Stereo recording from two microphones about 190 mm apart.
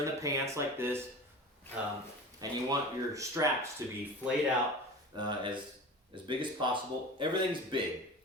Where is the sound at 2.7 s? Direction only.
15° right (ahead or behind).